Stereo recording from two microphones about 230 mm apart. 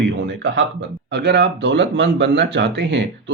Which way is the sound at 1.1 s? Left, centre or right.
Right.